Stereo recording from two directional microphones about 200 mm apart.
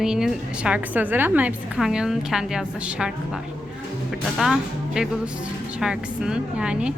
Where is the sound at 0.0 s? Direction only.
Centre (ahead or behind).